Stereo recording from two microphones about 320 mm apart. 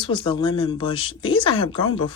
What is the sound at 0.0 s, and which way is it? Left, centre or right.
Speech, centre.